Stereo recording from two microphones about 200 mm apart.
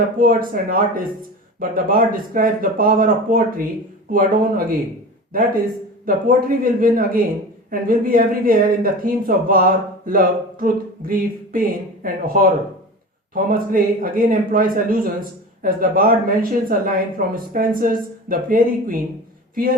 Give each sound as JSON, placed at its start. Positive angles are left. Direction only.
{"t": 0.2, "sound": "speech", "side_deg": -45}